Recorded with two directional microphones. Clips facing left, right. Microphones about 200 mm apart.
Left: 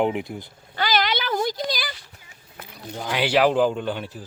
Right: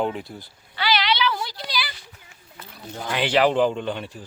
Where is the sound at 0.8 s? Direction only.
45° left (ahead or behind).